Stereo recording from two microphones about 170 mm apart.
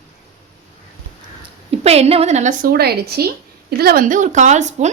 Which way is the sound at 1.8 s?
40° right (ahead or behind).